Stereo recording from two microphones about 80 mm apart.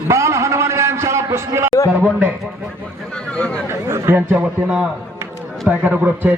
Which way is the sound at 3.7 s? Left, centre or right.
Right.